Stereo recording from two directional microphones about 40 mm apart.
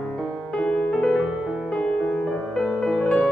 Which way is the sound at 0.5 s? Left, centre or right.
Centre.